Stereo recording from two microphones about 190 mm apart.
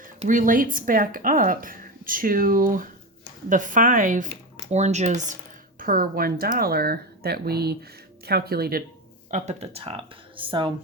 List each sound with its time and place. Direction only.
0.2 s speech: 45° right (ahead or behind)
5.8 s speech: 50° right (ahead or behind)
9.3 s speech: 35° right (ahead or behind)